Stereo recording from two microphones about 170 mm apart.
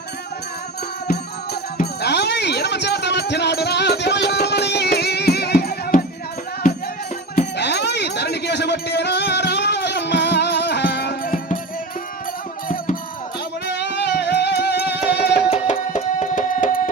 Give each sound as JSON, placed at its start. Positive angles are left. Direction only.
{"t": 1.8, "sound": "music", "side_deg": 75}
{"t": 7.5, "sound": "a sound", "side_deg": 80}
{"t": 12.6, "sound": "music", "side_deg": 55}
{"t": 13.7, "sound": "music", "side_deg": 90}
{"t": 15.4, "sound": "music", "side_deg": 35}